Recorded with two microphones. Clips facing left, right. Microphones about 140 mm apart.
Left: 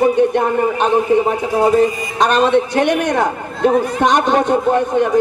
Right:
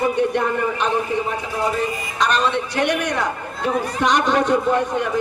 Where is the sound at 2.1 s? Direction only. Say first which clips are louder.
Left 7 dB; 50° left (ahead or behind).